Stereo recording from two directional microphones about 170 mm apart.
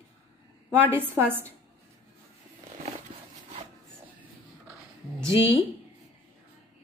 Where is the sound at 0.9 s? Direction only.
10° right (ahead or behind).